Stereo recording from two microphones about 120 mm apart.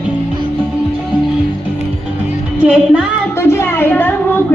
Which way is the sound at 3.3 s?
20° left (ahead or behind).